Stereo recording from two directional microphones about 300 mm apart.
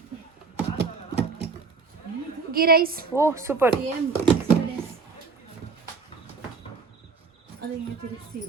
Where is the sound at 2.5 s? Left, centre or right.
Right.